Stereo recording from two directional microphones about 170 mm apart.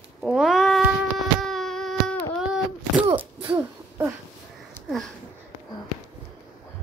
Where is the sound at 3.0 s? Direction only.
30° right (ahead or behind).